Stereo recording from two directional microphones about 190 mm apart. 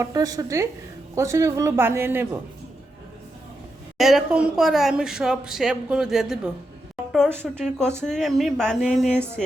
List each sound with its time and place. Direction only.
0.0 s a man's voice: 20° right (ahead or behind)
3.9 s speech: centre (ahead or behind)
7.5 s speech: 5° left (ahead or behind)